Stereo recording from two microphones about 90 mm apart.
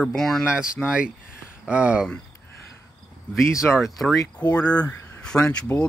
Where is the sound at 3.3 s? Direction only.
30° left (ahead or behind).